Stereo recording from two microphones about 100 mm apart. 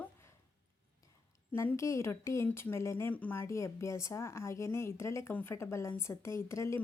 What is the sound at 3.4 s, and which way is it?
Speech, 30° left (ahead or behind).